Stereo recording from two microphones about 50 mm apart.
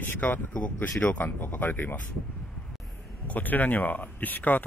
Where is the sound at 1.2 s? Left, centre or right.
Left.